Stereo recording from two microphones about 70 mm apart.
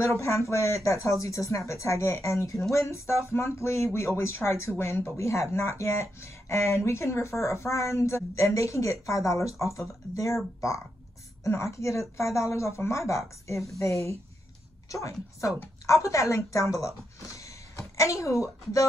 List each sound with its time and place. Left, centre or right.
0.2 s speech: left
11.4 s speech: left